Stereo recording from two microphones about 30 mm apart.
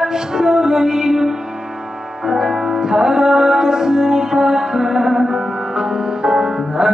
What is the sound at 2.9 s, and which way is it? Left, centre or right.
Music, right.